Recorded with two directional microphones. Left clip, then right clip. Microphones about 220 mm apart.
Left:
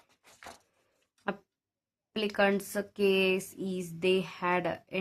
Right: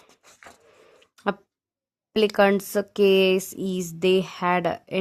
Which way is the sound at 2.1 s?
45° right (ahead or behind).